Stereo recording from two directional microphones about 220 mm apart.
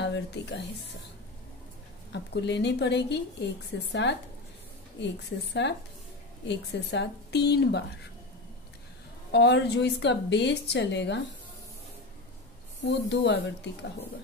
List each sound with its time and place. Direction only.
0.0 s a woman's voice: 55° left (ahead or behind)
2.1 s a woman's voice: 50° left (ahead or behind)
9.3 s a woman's voice: 50° left (ahead or behind)
12.8 s a woman's voice: 55° left (ahead or behind)